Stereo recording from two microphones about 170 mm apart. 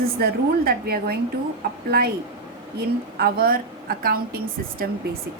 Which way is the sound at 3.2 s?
60° right (ahead or behind).